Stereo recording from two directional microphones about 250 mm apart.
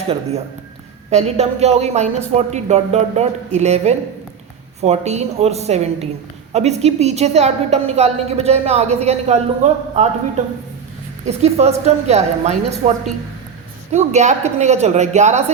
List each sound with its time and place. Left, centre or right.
0.1 s a woman's voice: right
11.3 s a woman's voice: right